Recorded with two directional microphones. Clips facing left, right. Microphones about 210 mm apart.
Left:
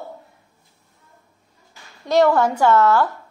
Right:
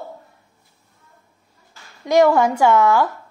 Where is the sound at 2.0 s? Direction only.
10° right (ahead or behind).